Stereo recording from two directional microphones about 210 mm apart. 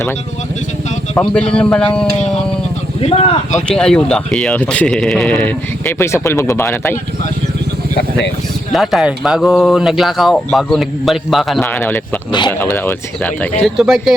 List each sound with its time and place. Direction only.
1.1 s speech: 5° left (ahead or behind)
3.0 s speech: 30° left (ahead or behind)
3.7 s speech: 5° left (ahead or behind)
8.7 s speech: centre (ahead or behind)